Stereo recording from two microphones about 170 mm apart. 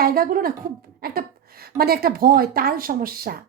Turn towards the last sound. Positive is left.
turn(degrees=-60)  # may be behind; listen again after turning